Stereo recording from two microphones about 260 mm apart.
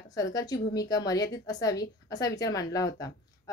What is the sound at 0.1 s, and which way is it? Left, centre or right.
A woman's voice, centre.